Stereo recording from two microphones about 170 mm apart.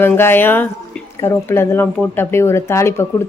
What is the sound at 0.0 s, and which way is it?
Speech, 15° left (ahead or behind).